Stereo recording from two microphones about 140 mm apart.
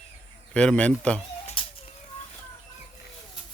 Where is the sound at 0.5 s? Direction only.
5° left (ahead or behind).